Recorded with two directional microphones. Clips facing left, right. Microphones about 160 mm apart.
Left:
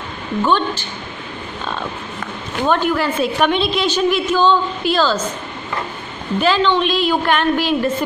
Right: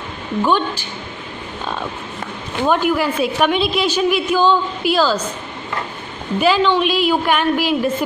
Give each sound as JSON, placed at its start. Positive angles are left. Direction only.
{"t": 0.4, "sound": "a woman's voice", "side_deg": -10}
{"t": 2.6, "sound": "a woman's voice", "side_deg": -10}
{"t": 6.4, "sound": "a woman's voice", "side_deg": -10}